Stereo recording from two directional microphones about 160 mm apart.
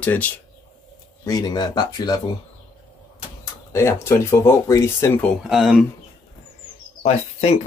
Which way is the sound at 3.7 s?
15° left (ahead or behind).